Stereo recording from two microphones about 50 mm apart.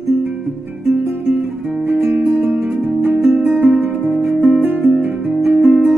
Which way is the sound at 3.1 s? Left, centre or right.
Centre.